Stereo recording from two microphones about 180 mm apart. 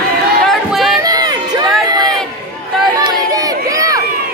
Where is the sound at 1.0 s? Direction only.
20° right (ahead or behind).